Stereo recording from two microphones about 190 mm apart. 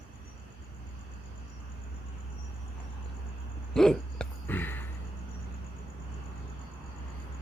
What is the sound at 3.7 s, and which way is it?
Hiccup, centre (ahead or behind).